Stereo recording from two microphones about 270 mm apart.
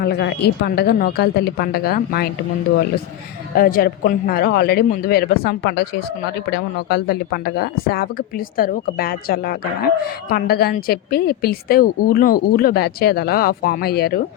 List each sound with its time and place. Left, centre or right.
0.0 s a woman's voice: left
3.5 s a woman's voice: left